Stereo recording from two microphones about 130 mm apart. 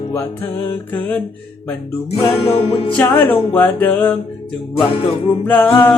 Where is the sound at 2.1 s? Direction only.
50° left (ahead or behind).